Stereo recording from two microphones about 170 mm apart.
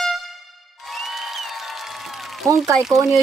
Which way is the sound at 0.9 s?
Centre (ahead or behind).